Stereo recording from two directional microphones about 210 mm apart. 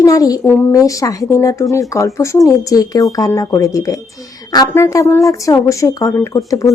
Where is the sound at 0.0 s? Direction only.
15° left (ahead or behind).